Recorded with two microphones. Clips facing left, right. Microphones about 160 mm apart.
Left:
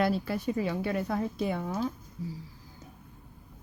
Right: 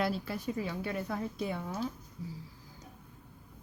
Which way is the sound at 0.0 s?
70° left (ahead or behind).